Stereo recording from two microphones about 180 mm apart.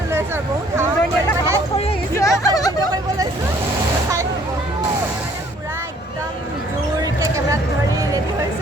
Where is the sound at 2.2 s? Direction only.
20° left (ahead or behind).